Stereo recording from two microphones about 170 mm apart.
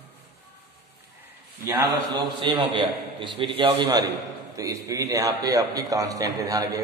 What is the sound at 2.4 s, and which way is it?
A man's voice, 30° right (ahead or behind).